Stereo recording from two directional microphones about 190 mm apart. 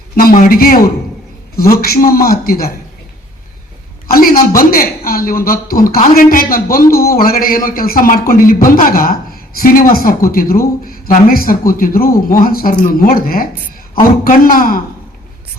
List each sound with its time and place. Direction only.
0.2 s speech: 50° left (ahead or behind)
4.1 s speech: 50° left (ahead or behind)